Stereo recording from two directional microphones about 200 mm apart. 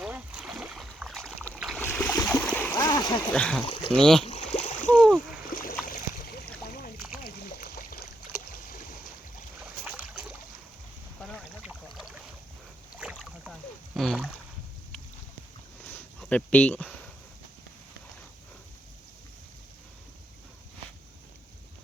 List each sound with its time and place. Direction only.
0.0 s boat: 5° right (ahead or behind)
1.8 s splash: 10° left (ahead or behind)
3.3 s speech: 5° left (ahead or behind)
3.7 s speech: 25° left (ahead or behind)
3.9 s speech: 5° left (ahead or behind)
4.5 s splash: 40° left (ahead or behind)
5.5 s a sound: 45° left (ahead or behind)
6.7 s boat: 45° left (ahead or behind)
7.3 s a sound: 45° left (ahead or behind)
9.8 s boat: 10° right (ahead or behind)
13.0 s rowboat: 5° right (ahead or behind)
15.8 s a sound: 5° left (ahead or behind)